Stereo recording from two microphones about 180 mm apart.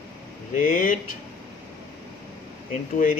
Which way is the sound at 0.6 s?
50° left (ahead or behind).